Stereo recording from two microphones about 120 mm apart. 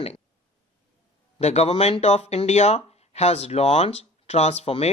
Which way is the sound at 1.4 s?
65° left (ahead or behind).